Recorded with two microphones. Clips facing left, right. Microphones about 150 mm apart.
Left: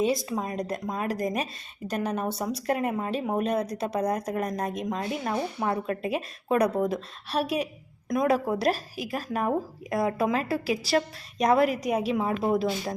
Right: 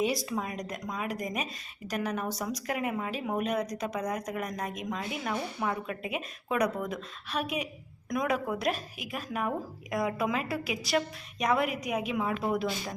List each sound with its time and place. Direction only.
0.0 s speech: 25° left (ahead or behind)
0.4 s a woman's voice: 30° left (ahead or behind)